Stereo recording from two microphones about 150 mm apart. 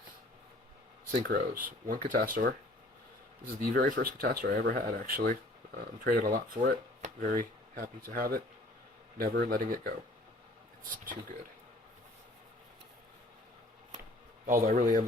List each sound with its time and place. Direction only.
1.3 s speech: 70° right (ahead or behind)
3.4 s speech: 85° right
6.2 s speech: 70° right (ahead or behind); by 9.9 s 85° right
14.4 s speech: 60° right (ahead or behind)